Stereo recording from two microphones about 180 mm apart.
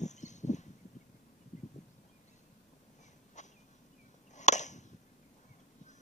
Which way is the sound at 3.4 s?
40° left (ahead or behind).